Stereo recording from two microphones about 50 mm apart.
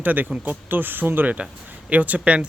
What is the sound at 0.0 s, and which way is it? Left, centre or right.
Speech, right.